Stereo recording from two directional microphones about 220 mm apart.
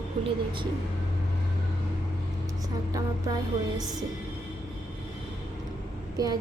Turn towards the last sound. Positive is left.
turn(degrees=-15)  # may be behind; listen again after turning